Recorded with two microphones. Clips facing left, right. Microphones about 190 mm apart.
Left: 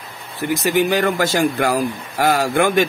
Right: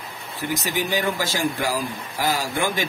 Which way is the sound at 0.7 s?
60° left (ahead or behind).